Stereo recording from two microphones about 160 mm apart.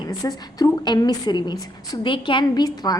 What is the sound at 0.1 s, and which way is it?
A woman's voice, 20° left (ahead or behind).